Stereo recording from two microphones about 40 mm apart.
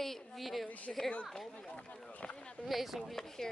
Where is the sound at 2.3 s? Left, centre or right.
Left.